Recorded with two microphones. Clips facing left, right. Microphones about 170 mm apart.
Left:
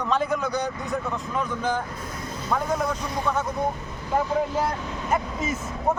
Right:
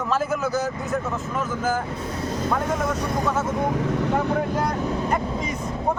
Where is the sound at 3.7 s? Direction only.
85° right.